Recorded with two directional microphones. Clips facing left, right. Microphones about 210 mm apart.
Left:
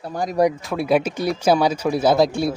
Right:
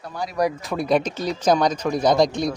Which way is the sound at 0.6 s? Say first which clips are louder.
Left 2 dB; 5° left (ahead or behind).